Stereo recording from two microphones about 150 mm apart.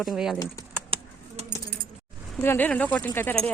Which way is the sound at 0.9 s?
45° right (ahead or behind).